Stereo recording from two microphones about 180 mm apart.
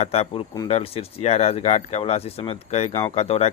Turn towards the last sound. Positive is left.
turn(degrees=35)  # may be behind; listen again after turning